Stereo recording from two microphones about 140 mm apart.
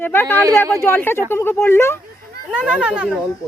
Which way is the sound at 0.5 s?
15° left (ahead or behind).